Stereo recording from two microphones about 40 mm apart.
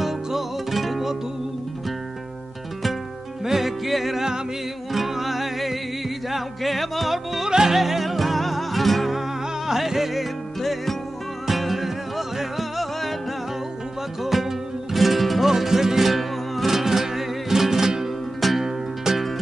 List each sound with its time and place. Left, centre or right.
0.0 s music: centre
3.4 s music: centre
7.5 s flamenco: centre
9.7 s music: centre
14.2 s music: centre
18.4 s music: centre
19.1 s music: centre